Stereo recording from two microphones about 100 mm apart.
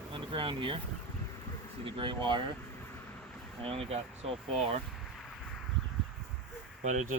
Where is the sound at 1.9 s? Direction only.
60° right (ahead or behind).